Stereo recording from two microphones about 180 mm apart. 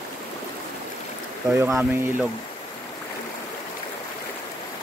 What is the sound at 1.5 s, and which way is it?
Speech, 15° right (ahead or behind).